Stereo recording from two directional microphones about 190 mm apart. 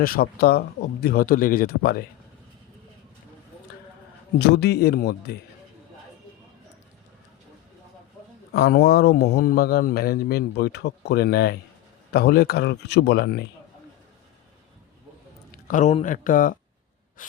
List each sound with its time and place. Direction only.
0.0 s speech: 50° left (ahead or behind)
4.4 s a man's voice: 60° left (ahead or behind)
8.5 s a man's voice: 55° left (ahead or behind)
15.6 s speech: 40° left (ahead or behind)